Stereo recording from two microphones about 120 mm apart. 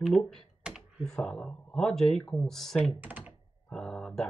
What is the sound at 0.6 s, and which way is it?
Speech, centre (ahead or behind).